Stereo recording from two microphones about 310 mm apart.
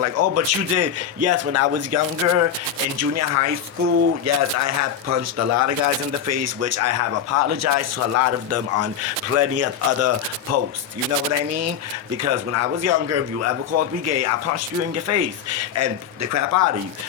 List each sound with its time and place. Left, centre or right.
0.0 s speech: right
12.1 s speech: right